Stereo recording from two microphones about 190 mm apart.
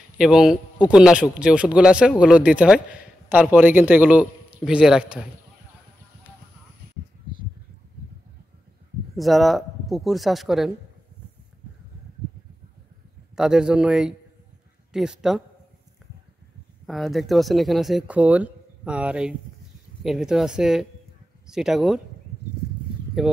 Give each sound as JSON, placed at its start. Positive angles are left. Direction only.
{"t": 0.2, "sound": "a man's voice", "side_deg": -5}
{"t": 9.1, "sound": "speech", "side_deg": 0}
{"t": 13.4, "sound": "speech", "side_deg": -5}
{"t": 16.8, "sound": "speech", "side_deg": 0}
{"t": 23.2, "sound": "speech", "side_deg": 0}